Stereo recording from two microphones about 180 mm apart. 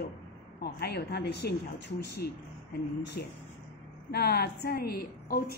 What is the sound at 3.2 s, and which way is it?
A woman's voice, 55° left (ahead or behind).